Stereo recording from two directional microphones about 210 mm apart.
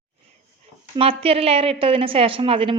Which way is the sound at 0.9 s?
25° right (ahead or behind).